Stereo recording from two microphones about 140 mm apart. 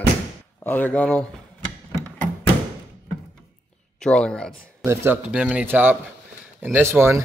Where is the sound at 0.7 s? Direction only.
15° left (ahead or behind).